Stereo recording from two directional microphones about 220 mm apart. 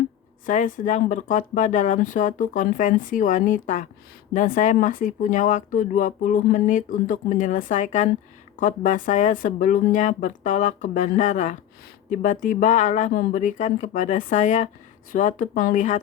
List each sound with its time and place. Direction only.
0.4 s speech: 35° left (ahead or behind)